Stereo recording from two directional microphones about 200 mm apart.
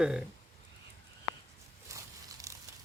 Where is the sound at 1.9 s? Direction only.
15° right (ahead or behind).